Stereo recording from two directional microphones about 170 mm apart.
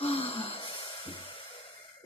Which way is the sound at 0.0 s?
35° left (ahead or behind).